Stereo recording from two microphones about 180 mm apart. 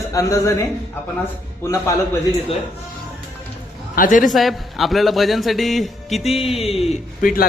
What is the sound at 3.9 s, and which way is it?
Speech, 50° left (ahead or behind).